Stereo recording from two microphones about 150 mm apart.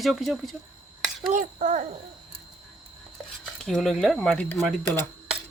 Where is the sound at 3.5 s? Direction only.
5° left (ahead or behind).